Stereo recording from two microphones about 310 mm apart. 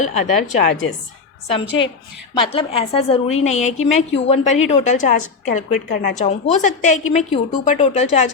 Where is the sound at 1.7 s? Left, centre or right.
Left.